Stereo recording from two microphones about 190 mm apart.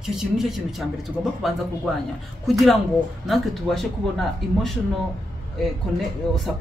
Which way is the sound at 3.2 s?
Centre (ahead or behind).